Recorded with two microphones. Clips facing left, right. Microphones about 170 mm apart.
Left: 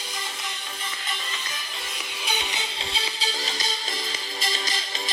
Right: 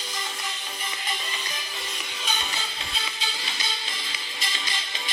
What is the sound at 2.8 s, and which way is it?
Music, 30° left (ahead or behind).